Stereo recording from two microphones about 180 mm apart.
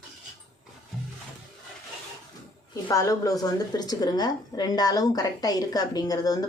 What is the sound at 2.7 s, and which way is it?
A woman's voice, 20° left (ahead or behind).